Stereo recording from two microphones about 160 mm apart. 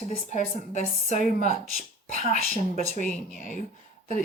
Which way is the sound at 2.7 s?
55° left (ahead or behind).